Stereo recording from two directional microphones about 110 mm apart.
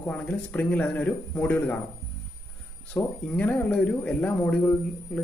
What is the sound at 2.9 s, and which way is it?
A man's voice, 15° left (ahead or behind).